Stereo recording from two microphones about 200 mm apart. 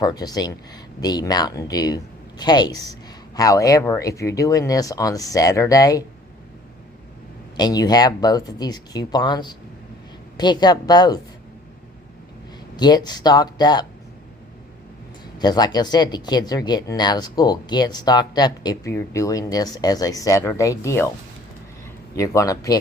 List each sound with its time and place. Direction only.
0.0 s speech: 20° left (ahead or behind)
7.5 s speech: 20° left (ahead or behind)
12.7 s speech: 20° left (ahead or behind)
15.4 s speech: 20° left (ahead or behind)
22.1 s speech: 15° left (ahead or behind)